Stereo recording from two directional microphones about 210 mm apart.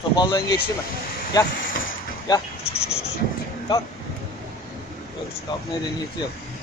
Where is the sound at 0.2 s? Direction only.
20° left (ahead or behind).